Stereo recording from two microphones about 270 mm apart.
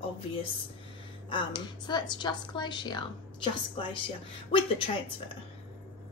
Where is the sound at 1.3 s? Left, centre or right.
Centre.